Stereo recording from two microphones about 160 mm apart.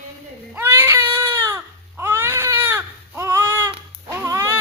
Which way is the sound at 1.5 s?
15° right (ahead or behind).